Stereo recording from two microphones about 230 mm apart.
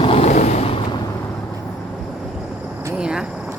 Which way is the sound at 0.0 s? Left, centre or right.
Left.